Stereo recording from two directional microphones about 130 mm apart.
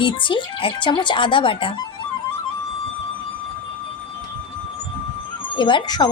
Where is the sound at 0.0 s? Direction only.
40° left (ahead or behind).